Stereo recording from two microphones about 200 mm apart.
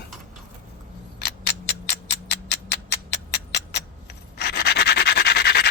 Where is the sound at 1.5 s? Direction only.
60° left (ahead or behind).